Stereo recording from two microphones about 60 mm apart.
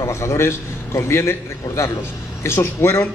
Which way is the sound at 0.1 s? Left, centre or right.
Left.